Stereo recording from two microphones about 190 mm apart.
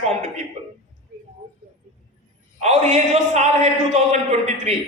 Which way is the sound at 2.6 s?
35° right (ahead or behind).